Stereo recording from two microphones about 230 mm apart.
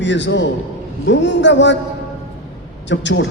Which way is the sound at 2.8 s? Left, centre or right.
Left.